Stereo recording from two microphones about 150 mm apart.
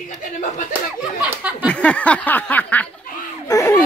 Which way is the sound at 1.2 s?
10° right (ahead or behind).